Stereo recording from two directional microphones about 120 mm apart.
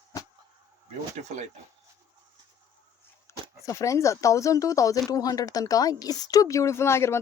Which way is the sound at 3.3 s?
25° left (ahead or behind).